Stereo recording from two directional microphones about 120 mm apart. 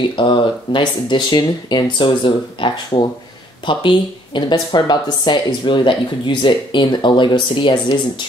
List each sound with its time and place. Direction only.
0.1 s speech: 45° left (ahead or behind)